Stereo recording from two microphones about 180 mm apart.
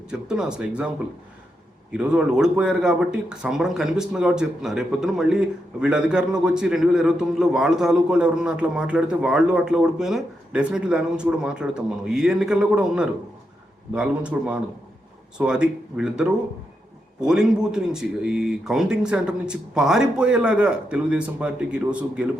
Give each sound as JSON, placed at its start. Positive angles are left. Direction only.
{"t": 0.1, "sound": "speech", "side_deg": -5}
{"t": 1.9, "sound": "a man's voice", "side_deg": -5}